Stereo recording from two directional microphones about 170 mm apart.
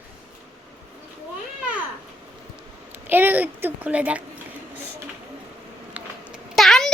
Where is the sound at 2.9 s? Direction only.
10° right (ahead or behind).